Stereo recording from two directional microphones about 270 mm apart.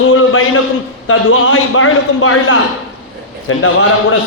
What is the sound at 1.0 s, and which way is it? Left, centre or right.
A man's voice, left.